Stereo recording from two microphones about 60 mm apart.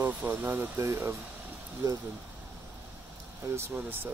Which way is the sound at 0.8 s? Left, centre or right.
Right.